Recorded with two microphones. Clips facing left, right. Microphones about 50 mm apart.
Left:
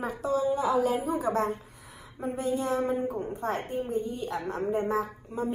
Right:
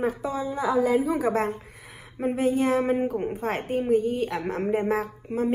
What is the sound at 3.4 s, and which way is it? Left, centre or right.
A woman's voice, right.